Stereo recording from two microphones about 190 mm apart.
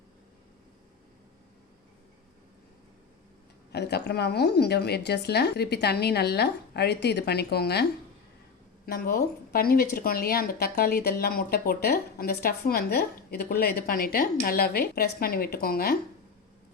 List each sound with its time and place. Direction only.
3.7 s a woman's voice: 60° left (ahead or behind)
8.9 s speech: 50° left (ahead or behind)